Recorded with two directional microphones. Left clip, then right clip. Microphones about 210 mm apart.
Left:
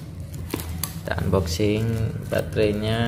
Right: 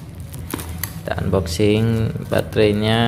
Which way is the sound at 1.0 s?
5° right (ahead or behind).